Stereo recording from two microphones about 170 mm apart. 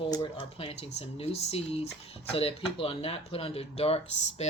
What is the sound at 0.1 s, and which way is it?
Speech, 30° left (ahead or behind).